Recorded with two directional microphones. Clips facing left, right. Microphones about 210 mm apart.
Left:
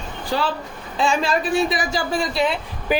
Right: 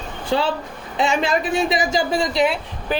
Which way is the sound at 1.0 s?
20° right (ahead or behind).